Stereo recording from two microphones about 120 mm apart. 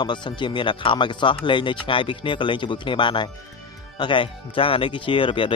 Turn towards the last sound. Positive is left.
turn(degrees=45)  # may be behind; listen again after turning